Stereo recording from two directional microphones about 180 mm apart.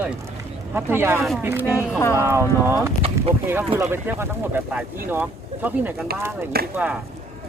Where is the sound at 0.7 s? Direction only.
15° right (ahead or behind).